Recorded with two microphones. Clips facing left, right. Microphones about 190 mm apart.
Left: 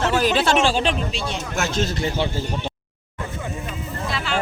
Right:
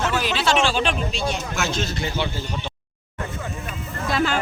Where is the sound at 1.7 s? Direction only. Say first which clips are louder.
Left 3 dB; 45° left (ahead or behind).